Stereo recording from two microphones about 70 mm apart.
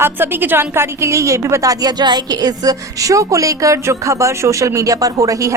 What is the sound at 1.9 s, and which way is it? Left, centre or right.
A woman's voice, right.